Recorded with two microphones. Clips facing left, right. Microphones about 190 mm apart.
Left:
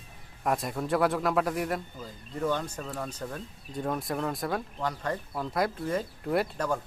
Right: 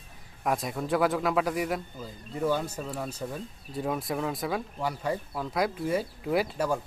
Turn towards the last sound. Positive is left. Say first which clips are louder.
# right 1 dB
turn(degrees=-5)  # may be behind; listen again after turning